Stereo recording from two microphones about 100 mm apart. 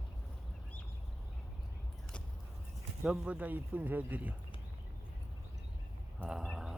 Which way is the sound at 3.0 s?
10° right (ahead or behind).